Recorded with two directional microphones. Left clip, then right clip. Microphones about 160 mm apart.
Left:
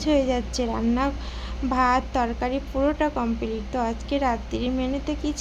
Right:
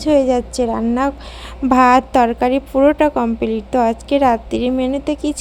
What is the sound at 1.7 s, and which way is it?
A woman's voice, 60° right (ahead or behind).